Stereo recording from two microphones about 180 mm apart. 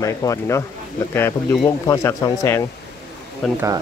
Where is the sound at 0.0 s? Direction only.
20° left (ahead or behind).